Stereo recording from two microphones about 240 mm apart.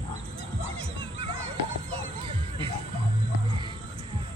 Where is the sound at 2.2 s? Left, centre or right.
Right.